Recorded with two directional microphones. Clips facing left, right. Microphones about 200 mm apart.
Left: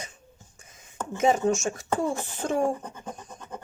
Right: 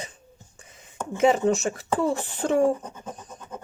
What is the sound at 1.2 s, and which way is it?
Speech, 30° right (ahead or behind).